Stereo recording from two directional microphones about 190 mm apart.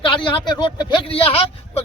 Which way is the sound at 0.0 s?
25° left (ahead or behind).